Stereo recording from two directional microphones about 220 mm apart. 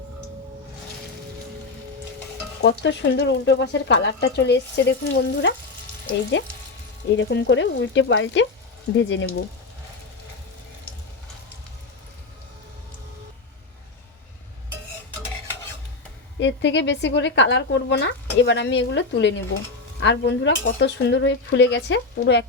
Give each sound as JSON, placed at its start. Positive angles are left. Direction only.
{"t": 2.6, "sound": "a woman's voice", "side_deg": 50}
{"t": 7.2, "sound": "frying", "side_deg": 50}
{"t": 16.4, "sound": "a woman's voice", "side_deg": 55}